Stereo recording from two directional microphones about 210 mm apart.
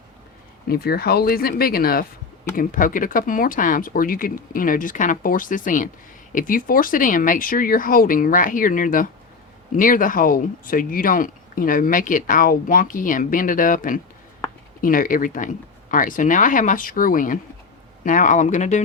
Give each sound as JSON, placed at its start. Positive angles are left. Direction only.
{"t": 0.7, "sound": "speech", "side_deg": 45}